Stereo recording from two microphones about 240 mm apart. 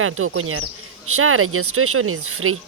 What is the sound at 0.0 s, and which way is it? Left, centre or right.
Speech, right.